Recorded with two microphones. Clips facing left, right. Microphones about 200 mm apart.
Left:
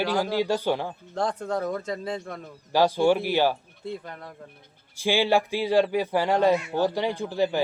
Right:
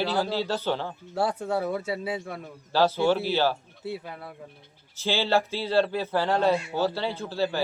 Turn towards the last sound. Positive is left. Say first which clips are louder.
# left 3 dB
turn(degrees=15)  # may be behind; listen again after turning